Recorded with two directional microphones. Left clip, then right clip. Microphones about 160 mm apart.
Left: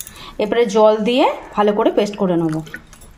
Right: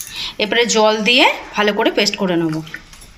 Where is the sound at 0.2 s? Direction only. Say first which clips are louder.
Right 1 dB; 55° left (ahead or behind).